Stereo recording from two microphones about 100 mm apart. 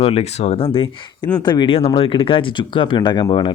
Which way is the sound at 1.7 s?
70° left (ahead or behind).